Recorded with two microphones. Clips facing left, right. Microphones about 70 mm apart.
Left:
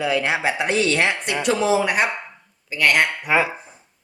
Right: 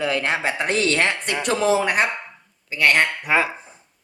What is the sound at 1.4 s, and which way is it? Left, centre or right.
Speech, right.